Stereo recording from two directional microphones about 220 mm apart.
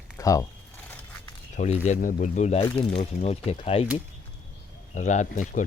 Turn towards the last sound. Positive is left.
turn(degrees=35)  # may be behind; listen again after turning